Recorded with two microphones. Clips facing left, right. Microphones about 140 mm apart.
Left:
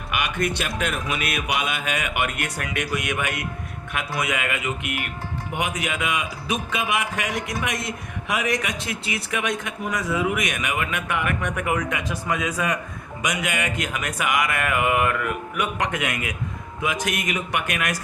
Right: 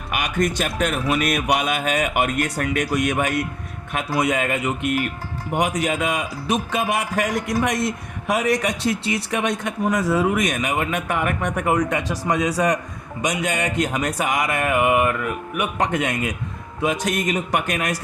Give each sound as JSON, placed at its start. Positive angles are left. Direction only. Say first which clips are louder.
{"t": 0.1, "sound": "music", "louder": "right 3 dB", "side_deg": -45}
{"t": 0.8, "sound": "speech", "louder": "right 5 dB", "side_deg": -45}